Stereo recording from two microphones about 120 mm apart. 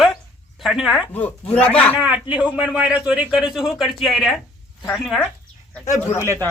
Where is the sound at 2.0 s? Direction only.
10° right (ahead or behind).